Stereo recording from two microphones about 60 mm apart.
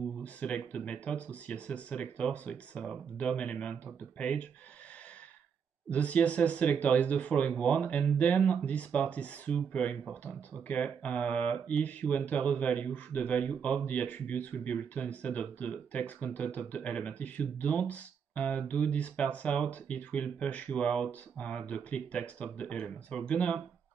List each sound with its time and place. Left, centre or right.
0.2 s mantra: left
5.9 s mantra: left